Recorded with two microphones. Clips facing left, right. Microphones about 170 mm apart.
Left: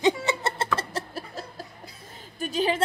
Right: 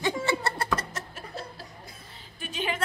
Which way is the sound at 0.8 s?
35° left (ahead or behind).